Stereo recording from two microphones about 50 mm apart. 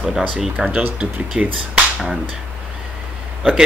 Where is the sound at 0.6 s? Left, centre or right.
Right.